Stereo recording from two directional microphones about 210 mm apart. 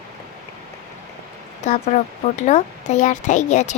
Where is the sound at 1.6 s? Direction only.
35° left (ahead or behind).